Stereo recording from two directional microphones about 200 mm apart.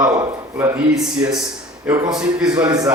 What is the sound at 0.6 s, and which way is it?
Speech, 10° right (ahead or behind).